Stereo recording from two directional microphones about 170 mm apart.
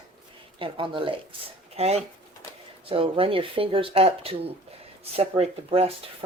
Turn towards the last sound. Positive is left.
turn(degrees=-35)  # may be behind; listen again after turning